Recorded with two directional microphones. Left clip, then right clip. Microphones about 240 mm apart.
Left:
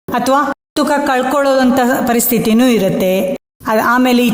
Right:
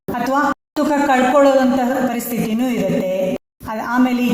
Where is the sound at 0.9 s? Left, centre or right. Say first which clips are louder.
Even; left.